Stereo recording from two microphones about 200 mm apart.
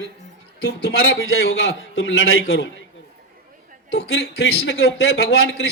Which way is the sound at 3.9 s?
60° left (ahead or behind).